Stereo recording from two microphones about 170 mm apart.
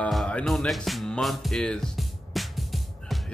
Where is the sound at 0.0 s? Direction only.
5° left (ahead or behind).